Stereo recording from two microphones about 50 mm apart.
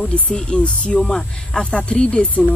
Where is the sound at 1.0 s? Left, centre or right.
Centre.